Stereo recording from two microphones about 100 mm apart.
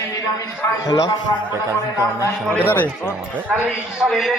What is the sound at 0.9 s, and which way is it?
Speech, 35° left (ahead or behind).